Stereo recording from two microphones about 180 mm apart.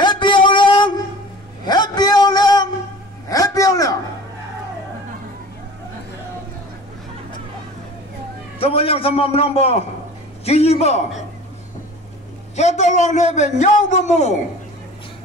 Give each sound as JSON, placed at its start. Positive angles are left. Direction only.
{"t": 0.0, "sound": "a sound", "side_deg": 25}
{"t": 8.5, "sound": "a man's voice", "side_deg": 30}
{"t": 12.5, "sound": "a man's voice", "side_deg": 40}